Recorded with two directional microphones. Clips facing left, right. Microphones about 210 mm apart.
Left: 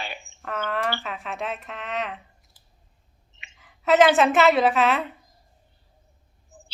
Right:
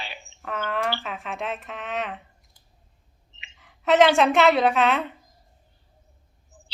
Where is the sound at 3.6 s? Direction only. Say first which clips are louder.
Even; centre (ahead or behind).